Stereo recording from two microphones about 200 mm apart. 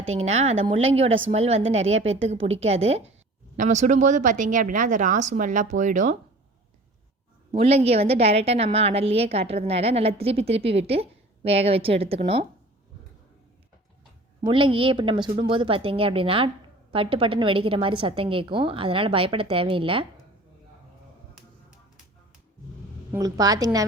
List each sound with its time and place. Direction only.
0.1 s a woman's voice: 35° right (ahead or behind)
7.5 s a woman's voice: 30° right (ahead or behind)
14.4 s a woman's voice: 25° right (ahead or behind)
23.1 s a woman's voice: 15° right (ahead or behind)